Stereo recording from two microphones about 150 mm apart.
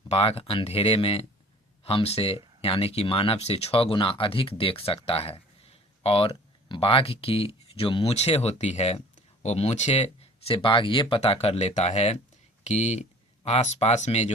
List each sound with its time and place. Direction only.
0.1 s speech: 40° left (ahead or behind)